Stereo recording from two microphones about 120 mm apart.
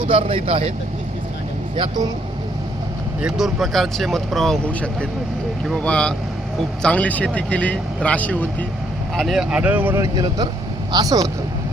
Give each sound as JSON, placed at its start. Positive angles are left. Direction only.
{"t": 0.0, "sound": "speech", "side_deg": -50}
{"t": 1.7, "sound": "speech", "side_deg": -45}
{"t": 3.2, "sound": "speech", "side_deg": -5}
{"t": 9.1, "sound": "speech", "side_deg": 0}
{"t": 10.0, "sound": "speech", "side_deg": -35}